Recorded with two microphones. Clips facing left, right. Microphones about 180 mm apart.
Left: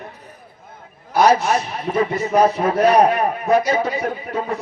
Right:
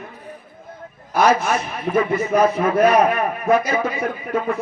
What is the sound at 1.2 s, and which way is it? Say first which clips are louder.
A man's voice: left 2 dB; 35° left (ahead or behind).